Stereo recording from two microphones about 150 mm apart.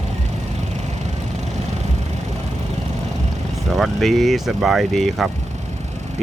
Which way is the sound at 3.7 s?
Centre (ahead or behind).